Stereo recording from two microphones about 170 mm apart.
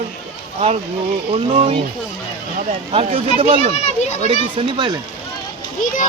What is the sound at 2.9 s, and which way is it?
Speech, 35° right (ahead or behind).